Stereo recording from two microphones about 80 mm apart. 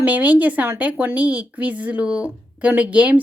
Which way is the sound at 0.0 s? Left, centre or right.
Centre.